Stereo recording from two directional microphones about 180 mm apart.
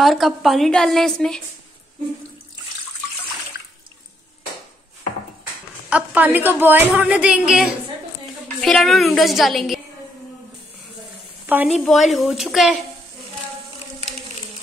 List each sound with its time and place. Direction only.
0.0 s a woman's voice: centre (ahead or behind)
5.9 s a woman's voice: 10° right (ahead or behind)
11.4 s a woman's voice: 10° right (ahead or behind)